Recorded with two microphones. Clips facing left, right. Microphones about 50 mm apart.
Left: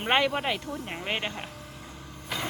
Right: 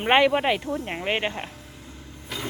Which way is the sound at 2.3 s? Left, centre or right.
Centre.